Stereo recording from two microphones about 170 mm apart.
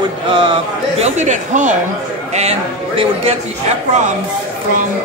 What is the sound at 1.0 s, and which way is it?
Speech, 45° right (ahead or behind).